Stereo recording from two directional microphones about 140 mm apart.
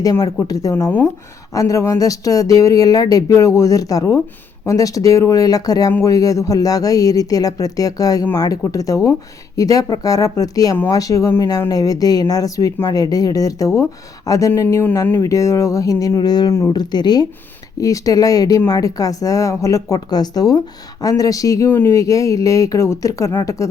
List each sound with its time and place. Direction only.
0.0 s speech: 25° left (ahead or behind)
0.9 s speech: 10° left (ahead or behind)
1.5 s speech: 25° left (ahead or behind)